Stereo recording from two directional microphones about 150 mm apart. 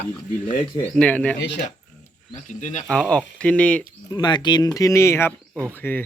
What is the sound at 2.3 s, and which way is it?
Speech, 55° left (ahead or behind).